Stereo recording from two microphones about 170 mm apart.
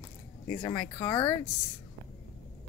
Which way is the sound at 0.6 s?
20° left (ahead or behind).